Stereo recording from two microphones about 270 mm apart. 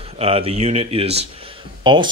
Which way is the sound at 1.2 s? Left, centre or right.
Centre.